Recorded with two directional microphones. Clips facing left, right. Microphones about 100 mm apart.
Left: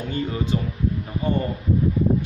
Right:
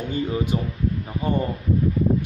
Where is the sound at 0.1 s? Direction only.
15° right (ahead or behind).